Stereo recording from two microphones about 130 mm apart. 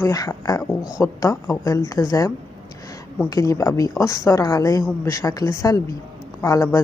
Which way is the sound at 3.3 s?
25° left (ahead or behind).